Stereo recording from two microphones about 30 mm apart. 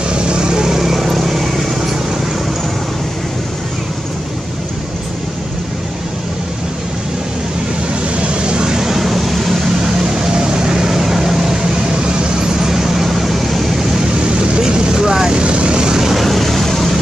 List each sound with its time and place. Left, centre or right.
0.1 s vehicle: right; by 1.5 s centre
8.2 s vehicle: right; by 9.0 s centre
9.0 s vehicle: centre
10.0 s vehicle: right
12.0 s vehicle: right; by 13.6 s centre
14.2 s vehicle: right
15.3 s vehicle: right
16.0 s vehicle: centre
16.3 s vehicle: centre